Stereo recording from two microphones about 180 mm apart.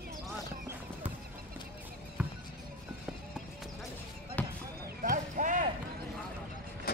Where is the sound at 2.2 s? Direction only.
5° right (ahead or behind).